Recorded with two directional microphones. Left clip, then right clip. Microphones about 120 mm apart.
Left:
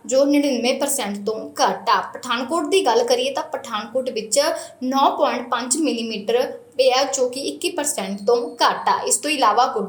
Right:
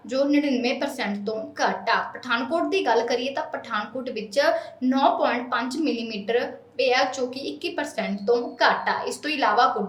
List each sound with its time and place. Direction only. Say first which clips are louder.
0.1 s a woman's voice: left 5 dB; 25° left (ahead or behind)